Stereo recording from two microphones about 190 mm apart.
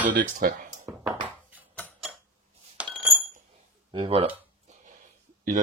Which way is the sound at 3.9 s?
30° right (ahead or behind).